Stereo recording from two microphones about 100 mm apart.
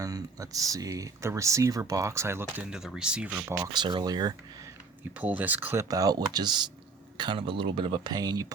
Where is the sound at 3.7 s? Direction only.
50° right (ahead or behind).